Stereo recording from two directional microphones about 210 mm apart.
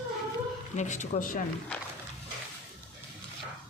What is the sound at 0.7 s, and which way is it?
Speech, 35° left (ahead or behind).